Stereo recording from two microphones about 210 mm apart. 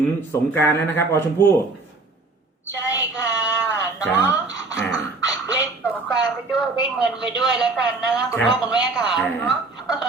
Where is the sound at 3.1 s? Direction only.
5° right (ahead or behind).